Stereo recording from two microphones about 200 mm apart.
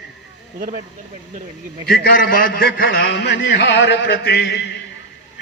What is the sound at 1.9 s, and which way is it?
A man's voice, 50° left (ahead or behind).